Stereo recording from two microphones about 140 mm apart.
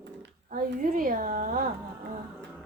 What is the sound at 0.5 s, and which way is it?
A woman's voice, 80° right.